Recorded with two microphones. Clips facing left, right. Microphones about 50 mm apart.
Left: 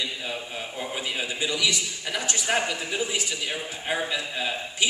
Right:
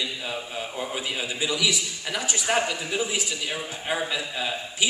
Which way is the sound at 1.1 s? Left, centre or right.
Centre.